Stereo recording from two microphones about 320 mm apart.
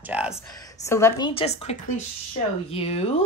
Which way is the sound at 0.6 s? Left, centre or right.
Centre.